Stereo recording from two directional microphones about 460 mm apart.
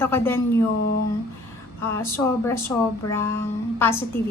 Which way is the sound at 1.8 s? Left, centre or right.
Centre.